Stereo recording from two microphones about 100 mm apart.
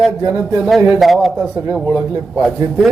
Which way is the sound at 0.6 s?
5° right (ahead or behind).